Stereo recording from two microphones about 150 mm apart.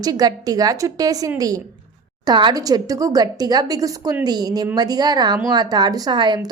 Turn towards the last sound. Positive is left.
turn(degrees=-30)  # may be behind; listen again after turning